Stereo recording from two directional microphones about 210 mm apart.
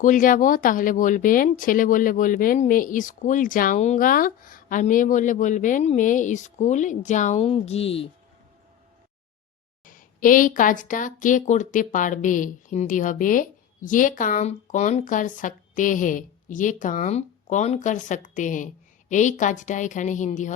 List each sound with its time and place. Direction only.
0.0 s speech: 40° left (ahead or behind)
9.8 s speech: 40° left (ahead or behind)